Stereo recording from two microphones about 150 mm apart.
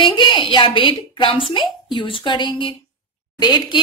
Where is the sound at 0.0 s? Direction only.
35° left (ahead or behind).